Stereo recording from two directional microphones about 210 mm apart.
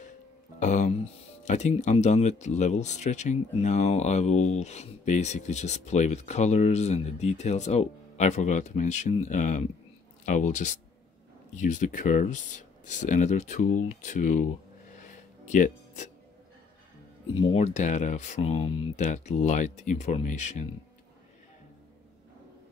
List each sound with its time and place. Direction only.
0.6 s speech: 35° left (ahead or behind)
15.0 s music: 35° left (ahead or behind)
17.4 s speech: 25° left (ahead or behind)